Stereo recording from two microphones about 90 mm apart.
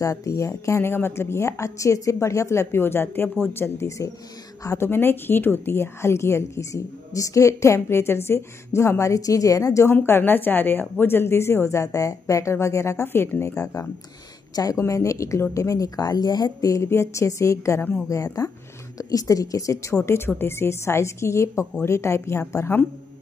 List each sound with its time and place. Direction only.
0.0 s a woman's voice: 40° left (ahead or behind)
9.9 s a woman's voice: 25° left (ahead or behind)